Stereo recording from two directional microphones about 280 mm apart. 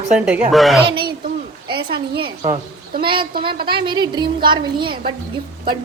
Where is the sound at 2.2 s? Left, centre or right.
Centre.